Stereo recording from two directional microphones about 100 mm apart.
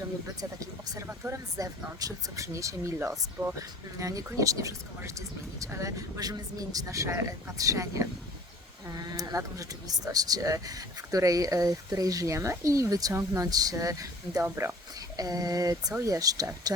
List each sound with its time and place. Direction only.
0.6 s speech: 35° right (ahead or behind)
1.0 s speech: 20° right (ahead or behind)
1.5 s speech: 35° right (ahead or behind)
14.4 s speech: 25° right (ahead or behind)
15.1 s speech: 35° right (ahead or behind)